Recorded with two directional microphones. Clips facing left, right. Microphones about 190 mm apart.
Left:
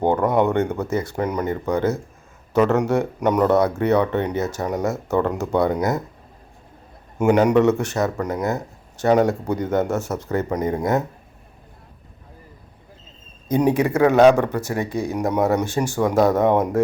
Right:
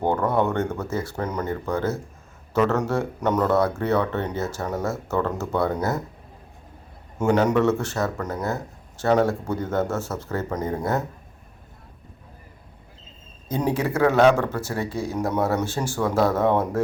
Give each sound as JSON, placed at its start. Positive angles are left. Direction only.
{"t": 0.0, "sound": "speech", "side_deg": 15}
{"t": 7.2, "sound": "speech", "side_deg": 15}
{"t": 13.5, "sound": "speech", "side_deg": 15}